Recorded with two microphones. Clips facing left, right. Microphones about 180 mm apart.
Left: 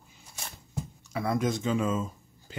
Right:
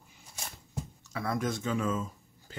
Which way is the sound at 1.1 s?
20° left (ahead or behind).